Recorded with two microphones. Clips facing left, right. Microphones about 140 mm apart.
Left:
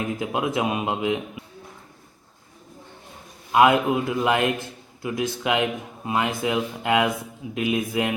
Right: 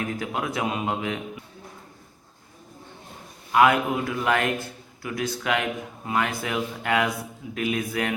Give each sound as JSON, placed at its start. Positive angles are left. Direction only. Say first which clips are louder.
{"t": 0.2, "sound": "a man's voice", "louder": "left 4 dB", "side_deg": 20}
{"t": 3.5, "sound": "a man's voice", "louder": "left 2 dB", "side_deg": 20}